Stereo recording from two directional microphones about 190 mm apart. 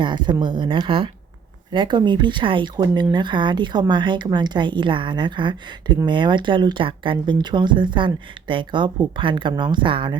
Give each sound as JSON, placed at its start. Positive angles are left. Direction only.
{"t": 0.0, "sound": "speech", "side_deg": -25}